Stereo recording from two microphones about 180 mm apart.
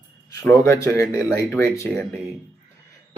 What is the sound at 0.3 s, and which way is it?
Speech, 15° left (ahead or behind).